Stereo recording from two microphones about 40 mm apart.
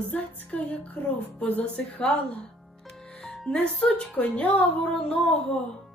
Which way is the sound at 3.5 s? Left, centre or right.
Left.